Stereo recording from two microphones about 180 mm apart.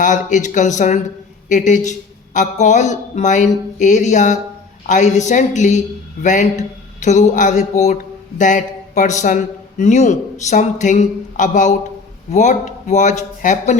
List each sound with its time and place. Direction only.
0.0 s a man's voice: 45° left (ahead or behind)